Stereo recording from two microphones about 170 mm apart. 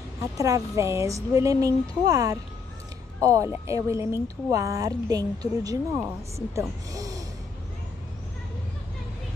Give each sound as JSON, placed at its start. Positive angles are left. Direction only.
{"t": 0.4, "sound": "a woman's voice", "side_deg": -20}